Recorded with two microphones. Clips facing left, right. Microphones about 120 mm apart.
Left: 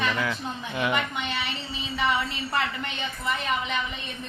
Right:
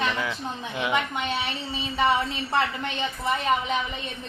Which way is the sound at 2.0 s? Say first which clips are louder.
Right 3 dB; 30° right (ahead or behind).